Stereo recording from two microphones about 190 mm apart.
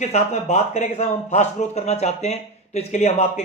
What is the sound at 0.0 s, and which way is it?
Speech, 35° left (ahead or behind).